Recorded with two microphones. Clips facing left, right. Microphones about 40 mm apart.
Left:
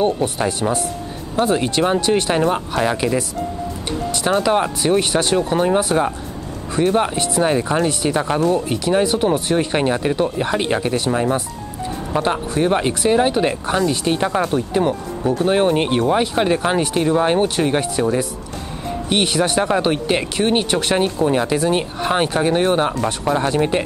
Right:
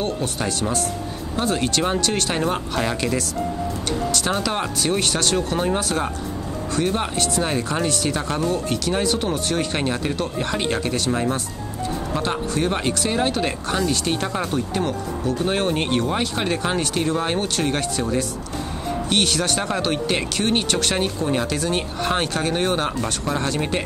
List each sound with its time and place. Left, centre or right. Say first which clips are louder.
0.0 s speech: left 6 dB; centre
22.9 s speech: left 5 dB; centre